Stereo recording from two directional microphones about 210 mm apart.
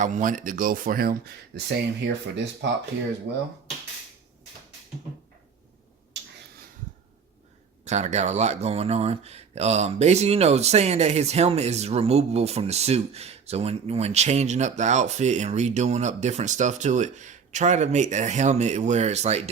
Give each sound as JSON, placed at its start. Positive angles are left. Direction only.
{"t": 0.0, "sound": "speech", "side_deg": -35}
{"t": 6.1, "sound": "a sound", "side_deg": -55}
{"t": 7.9, "sound": "speech", "side_deg": -30}